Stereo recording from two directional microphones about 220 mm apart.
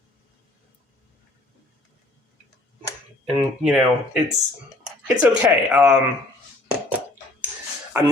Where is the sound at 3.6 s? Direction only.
5° right (ahead or behind).